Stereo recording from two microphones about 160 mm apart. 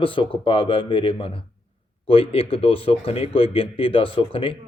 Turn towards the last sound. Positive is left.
turn(degrees=35)  # may be behind; listen again after turning